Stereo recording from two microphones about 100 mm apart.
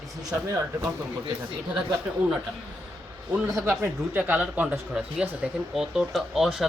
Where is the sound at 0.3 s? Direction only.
30° right (ahead or behind).